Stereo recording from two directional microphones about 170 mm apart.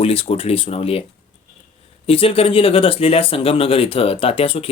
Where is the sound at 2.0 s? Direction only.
35° left (ahead or behind).